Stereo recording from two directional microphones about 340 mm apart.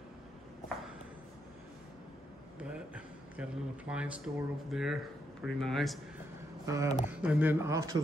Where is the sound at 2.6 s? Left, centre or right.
Centre.